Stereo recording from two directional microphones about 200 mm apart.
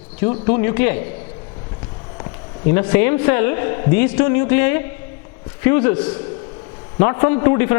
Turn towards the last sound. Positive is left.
turn(degrees=15)  # may be behind; listen again after turning